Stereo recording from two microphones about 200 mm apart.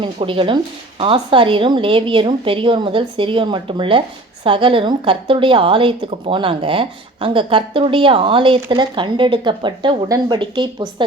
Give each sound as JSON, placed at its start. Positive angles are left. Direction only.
{"t": 0.0, "sound": "a woman's voice", "side_deg": -25}